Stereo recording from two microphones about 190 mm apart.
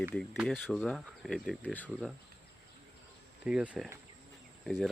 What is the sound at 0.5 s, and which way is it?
Speech, 5° left (ahead or behind).